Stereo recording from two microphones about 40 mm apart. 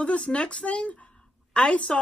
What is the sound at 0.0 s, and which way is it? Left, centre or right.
Speech, left.